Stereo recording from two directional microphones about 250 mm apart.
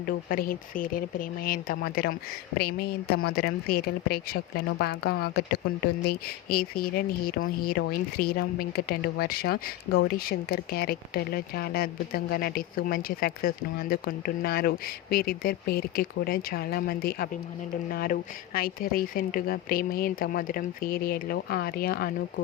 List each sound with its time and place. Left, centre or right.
0.0 s speech: left